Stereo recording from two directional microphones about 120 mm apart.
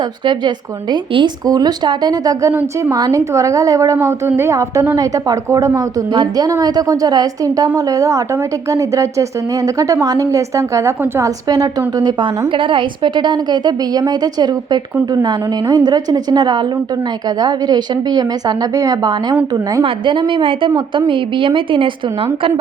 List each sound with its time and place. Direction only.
0.3 s a woman's voice: 40° right (ahead or behind)
2.5 s a woman's voice: 15° right (ahead or behind)
2.9 s a woman's voice: 30° right (ahead or behind)
19.8 s a woman's voice: 45° right (ahead or behind)